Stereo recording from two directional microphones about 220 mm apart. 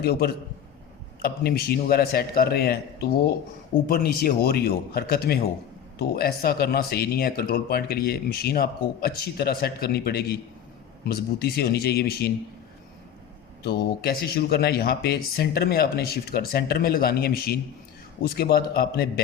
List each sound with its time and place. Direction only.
0.0 s speech: 45° left (ahead or behind)
13.6 s speech: 45° left (ahead or behind)